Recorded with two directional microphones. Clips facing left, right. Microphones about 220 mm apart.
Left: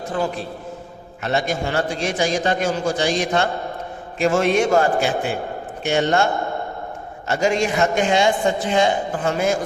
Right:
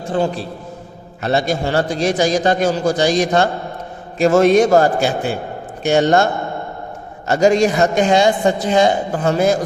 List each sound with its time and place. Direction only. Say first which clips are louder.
0.1 s a man's voice: right 5 dB; 30° right (ahead or behind)
7.3 s a man's voice: right 6 dB; 40° right (ahead or behind)